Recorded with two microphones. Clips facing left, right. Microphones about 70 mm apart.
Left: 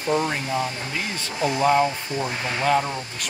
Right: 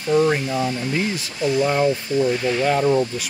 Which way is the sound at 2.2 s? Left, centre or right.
Left.